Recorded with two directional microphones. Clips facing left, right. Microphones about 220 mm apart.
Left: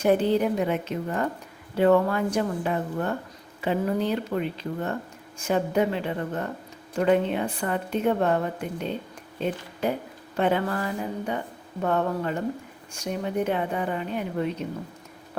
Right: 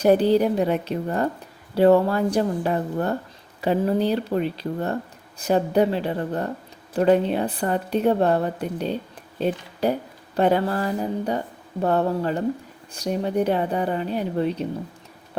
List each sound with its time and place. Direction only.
0.0 s speech: 35° right (ahead or behind)